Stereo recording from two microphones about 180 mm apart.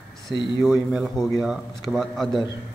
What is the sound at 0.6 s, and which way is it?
A man's voice, centre (ahead or behind).